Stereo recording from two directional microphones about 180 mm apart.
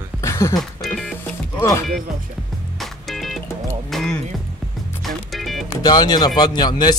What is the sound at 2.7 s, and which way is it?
Music, centre (ahead or behind).